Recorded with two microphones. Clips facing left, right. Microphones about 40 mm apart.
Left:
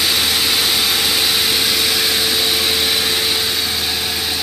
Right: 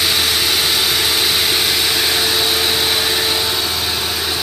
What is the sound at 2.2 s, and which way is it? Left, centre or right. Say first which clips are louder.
Vehicle: right 1 dB; right.